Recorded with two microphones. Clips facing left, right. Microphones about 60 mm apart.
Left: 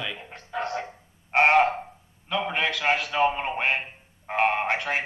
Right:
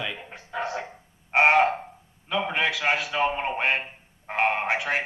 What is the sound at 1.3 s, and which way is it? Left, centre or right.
Frog, centre.